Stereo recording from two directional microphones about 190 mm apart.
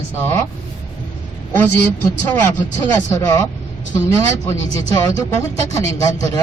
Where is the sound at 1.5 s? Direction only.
10° left (ahead or behind).